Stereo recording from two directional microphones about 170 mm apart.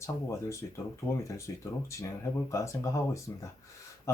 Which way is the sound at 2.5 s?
15° left (ahead or behind).